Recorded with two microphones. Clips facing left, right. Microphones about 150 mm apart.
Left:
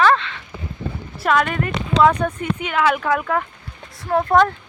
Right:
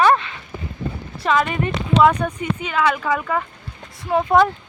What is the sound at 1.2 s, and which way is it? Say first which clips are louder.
Speech: even; centre (ahead or behind).